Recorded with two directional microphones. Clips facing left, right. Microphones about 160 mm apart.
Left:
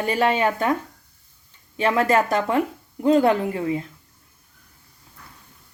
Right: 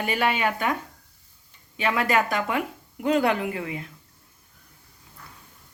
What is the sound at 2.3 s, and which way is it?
Speech, 30° left (ahead or behind).